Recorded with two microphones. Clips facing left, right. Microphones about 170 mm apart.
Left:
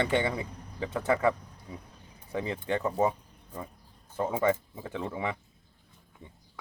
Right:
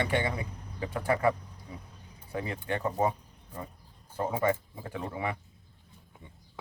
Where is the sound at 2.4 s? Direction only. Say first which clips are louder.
Left 2 dB; 25° left (ahead or behind).